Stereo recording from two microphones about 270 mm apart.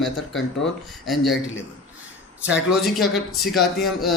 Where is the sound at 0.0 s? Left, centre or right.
Centre.